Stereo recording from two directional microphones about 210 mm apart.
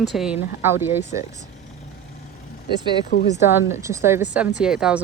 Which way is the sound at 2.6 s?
50° left (ahead or behind).